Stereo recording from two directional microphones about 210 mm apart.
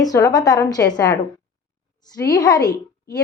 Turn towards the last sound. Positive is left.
turn(degrees=20)  # may be behind; listen again after turning